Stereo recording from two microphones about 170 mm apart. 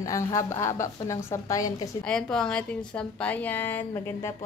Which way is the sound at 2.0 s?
5° left (ahead or behind).